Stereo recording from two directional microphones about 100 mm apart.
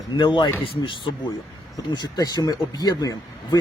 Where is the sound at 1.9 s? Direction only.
45° left (ahead or behind).